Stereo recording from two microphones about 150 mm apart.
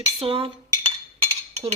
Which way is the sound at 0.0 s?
35° right (ahead or behind).